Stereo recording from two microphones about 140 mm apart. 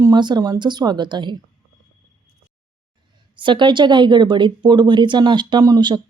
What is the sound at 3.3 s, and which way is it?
Speech, 35° right (ahead or behind).